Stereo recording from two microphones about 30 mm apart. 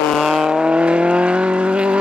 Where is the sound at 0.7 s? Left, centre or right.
Right.